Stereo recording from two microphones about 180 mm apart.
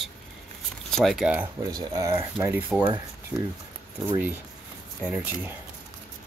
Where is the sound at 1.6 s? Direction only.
20° right (ahead or behind).